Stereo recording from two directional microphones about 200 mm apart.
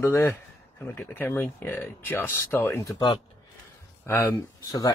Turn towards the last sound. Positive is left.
turn(degrees=20)  # may be behind; listen again after turning